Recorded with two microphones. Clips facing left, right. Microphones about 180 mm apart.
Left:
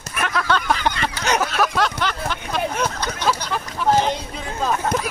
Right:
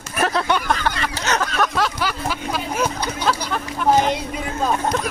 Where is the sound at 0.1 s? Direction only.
35° right (ahead or behind).